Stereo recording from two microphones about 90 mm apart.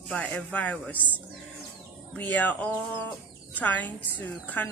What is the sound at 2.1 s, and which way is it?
Speech, 20° left (ahead or behind).